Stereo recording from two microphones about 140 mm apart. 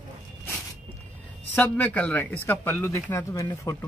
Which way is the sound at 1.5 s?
10° left (ahead or behind).